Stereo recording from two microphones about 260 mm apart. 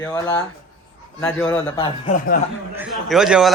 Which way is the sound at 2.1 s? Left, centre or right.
Left.